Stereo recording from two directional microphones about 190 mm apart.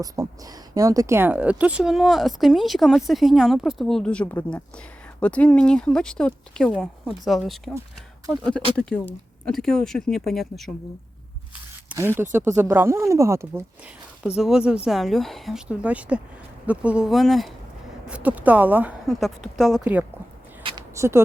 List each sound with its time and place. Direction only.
0.0 s speech: 20° right (ahead or behind); by 7.7 s centre (ahead or behind)
8.7 s speech: 5° left (ahead or behind)
11.9 s speech: 10° right (ahead or behind)
14.3 s speech: 5° right (ahead or behind)
20.7 s a sound: 20° right (ahead or behind)